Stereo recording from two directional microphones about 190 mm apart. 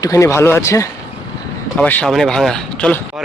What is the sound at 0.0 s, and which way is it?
A man's voice, 15° left (ahead or behind).